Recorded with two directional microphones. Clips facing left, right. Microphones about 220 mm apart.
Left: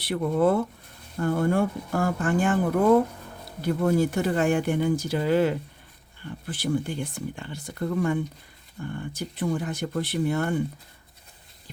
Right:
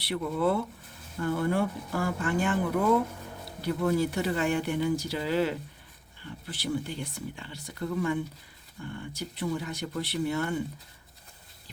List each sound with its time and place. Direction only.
0.0 s speech: 50° left (ahead or behind)
3.6 s speech: 50° left (ahead or behind)